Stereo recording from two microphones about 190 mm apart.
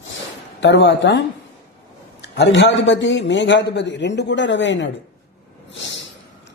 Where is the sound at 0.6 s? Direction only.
65° left (ahead or behind).